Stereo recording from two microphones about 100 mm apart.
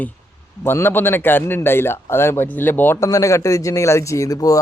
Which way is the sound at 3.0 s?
35° left (ahead or behind).